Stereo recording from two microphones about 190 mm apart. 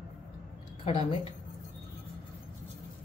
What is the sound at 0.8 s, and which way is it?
Speech, 30° left (ahead or behind).